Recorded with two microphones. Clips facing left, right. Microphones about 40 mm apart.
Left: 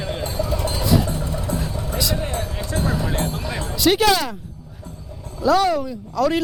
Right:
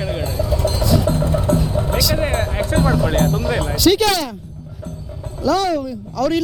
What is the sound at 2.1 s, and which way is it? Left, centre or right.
Music, right.